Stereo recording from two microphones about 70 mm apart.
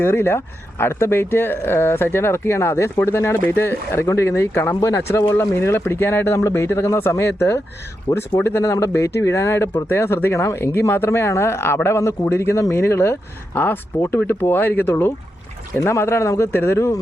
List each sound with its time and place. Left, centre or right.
0.0 s speech: left